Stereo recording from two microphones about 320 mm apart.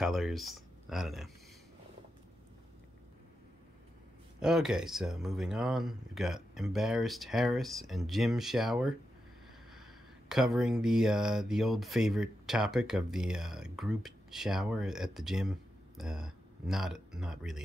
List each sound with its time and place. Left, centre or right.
0.0 s speech: centre
4.4 s speech: centre